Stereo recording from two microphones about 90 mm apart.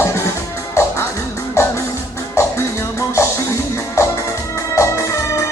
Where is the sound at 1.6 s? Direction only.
30° left (ahead or behind).